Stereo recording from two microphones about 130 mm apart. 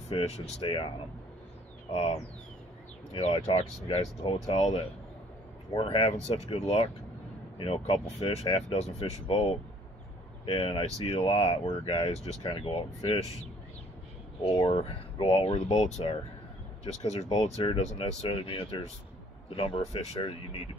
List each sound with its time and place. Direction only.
0.1 s speech: 50° left (ahead or behind)
0.7 s speech: 40° left (ahead or behind)
4.5 s speech: 60° left (ahead or behind)
5.8 s speech: 45° left (ahead or behind)
7.5 s speech: 45° left (ahead or behind)
14.5 s speech: 35° left (ahead or behind); by 20.2 s 55° left (ahead or behind)